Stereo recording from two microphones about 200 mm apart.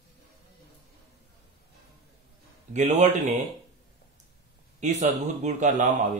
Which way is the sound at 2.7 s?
35° right (ahead or behind).